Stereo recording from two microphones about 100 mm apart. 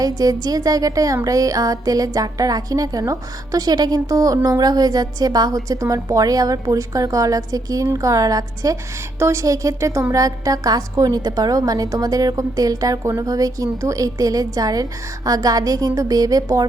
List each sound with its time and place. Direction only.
0.0 s a woman's voice: 40° right (ahead or behind)